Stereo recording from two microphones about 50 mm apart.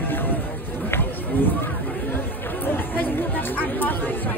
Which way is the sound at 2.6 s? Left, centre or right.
Left.